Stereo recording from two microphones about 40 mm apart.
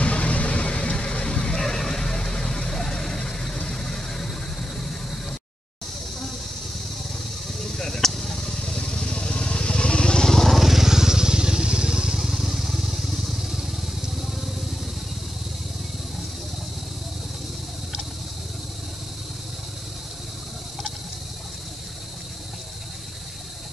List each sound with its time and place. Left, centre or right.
0.0 s vehicle: left
1.6 s vehicle: centre
4.7 s a sound: centre
7.5 s vehicle: centre
10.3 s vehicle: centre
10.6 s vehicle: centre